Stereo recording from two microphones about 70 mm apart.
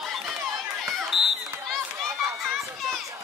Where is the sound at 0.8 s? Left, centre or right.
Centre.